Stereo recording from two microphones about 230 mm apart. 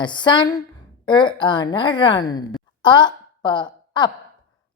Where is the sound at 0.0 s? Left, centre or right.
Centre.